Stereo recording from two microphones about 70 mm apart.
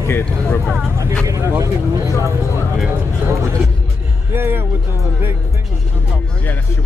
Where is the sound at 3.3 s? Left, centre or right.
Right.